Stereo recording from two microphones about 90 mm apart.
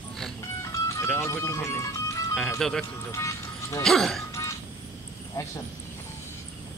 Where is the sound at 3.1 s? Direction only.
35° left (ahead or behind).